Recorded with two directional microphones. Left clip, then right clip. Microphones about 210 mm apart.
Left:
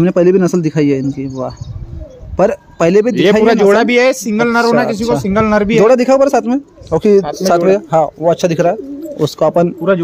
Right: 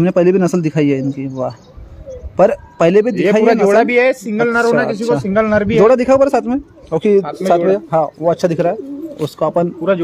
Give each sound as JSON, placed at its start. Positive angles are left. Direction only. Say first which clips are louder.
{"t": 0.0, "sound": "a man's voice", "louder": "left 2 dB", "side_deg": 0}
{"t": 3.4, "sound": "speech", "louder": "left 2 dB", "side_deg": 45}
{"t": 5.8, "sound": "speech", "louder": "left 1 dB", "side_deg": 10}